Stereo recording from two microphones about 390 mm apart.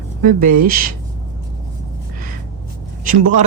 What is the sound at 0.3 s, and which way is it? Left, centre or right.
Speech, right.